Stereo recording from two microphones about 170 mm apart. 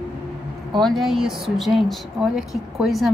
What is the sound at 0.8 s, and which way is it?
Speech, centre (ahead or behind).